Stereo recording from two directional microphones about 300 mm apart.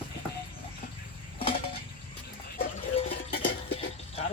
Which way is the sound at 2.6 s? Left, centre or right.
Left.